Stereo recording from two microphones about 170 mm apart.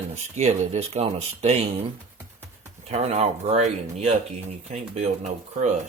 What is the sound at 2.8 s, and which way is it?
Speech, 40° right (ahead or behind).